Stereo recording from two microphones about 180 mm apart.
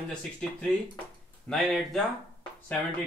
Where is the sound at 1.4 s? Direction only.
Centre (ahead or behind).